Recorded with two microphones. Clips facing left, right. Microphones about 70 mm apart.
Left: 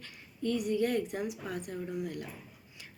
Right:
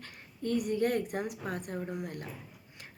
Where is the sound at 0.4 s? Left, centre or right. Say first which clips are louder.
Even; right.